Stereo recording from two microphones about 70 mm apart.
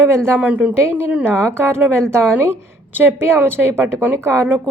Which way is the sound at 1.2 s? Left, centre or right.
Right.